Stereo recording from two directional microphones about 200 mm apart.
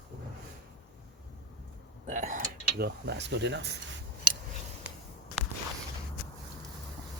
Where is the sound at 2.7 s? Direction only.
55° right (ahead or behind).